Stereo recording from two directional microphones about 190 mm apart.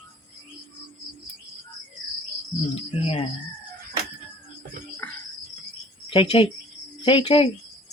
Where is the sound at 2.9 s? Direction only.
30° left (ahead or behind).